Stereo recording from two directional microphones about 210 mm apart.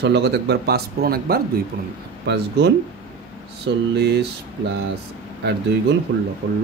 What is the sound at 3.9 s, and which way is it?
Speech, 50° right (ahead or behind).